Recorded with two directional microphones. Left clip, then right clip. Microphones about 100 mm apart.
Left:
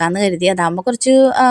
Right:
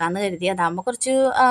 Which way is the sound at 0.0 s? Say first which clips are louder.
Left 7 dB; 55° left (ahead or behind).